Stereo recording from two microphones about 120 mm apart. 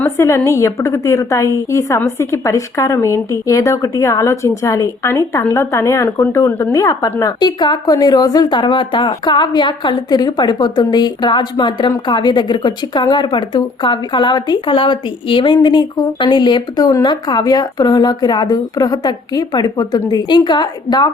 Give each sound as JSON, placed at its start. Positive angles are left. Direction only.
{"t": 0.0, "sound": "a woman's voice", "side_deg": 25}